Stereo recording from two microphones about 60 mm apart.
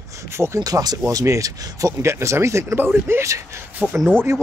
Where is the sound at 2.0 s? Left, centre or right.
Right.